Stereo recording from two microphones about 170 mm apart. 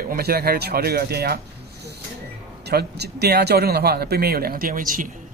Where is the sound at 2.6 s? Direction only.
75° right (ahead or behind).